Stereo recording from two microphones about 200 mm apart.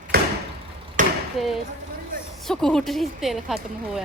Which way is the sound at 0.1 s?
50° right (ahead or behind).